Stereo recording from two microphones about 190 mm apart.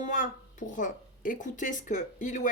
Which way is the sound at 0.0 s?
40° left (ahead or behind).